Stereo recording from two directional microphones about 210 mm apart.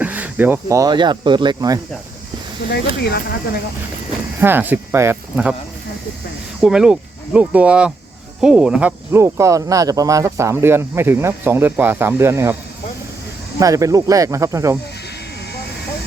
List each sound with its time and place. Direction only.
0.0 s speech: 5° right (ahead or behind)
2.6 s speech: 50° left (ahead or behind)
4.4 s speech: 10° right (ahead or behind)
6.6 s speech: 5° right (ahead or behind)
13.6 s speech: 15° right (ahead or behind)